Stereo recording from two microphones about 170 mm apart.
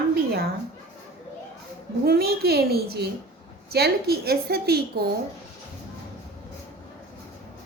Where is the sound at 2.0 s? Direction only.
65° right (ahead or behind).